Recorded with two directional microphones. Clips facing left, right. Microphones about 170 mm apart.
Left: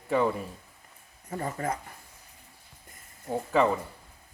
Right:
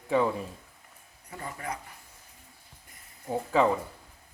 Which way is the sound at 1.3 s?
40° left (ahead or behind).